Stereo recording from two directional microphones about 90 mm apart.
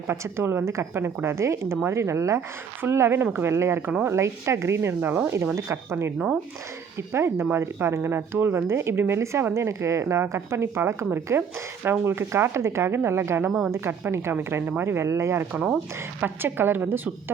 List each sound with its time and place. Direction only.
0.1 s speech: 30° right (ahead or behind)
6.1 s speech: 5° right (ahead or behind)
7.1 s speech: 25° right (ahead or behind)